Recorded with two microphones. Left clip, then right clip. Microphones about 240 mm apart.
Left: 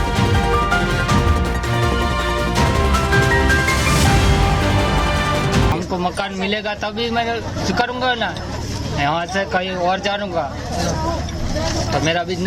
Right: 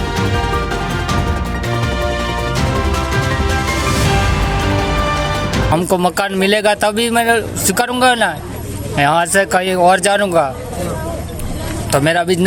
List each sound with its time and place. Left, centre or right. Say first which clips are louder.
5.7 s speech: right 7 dB; right
12.0 s speech: right 8 dB; right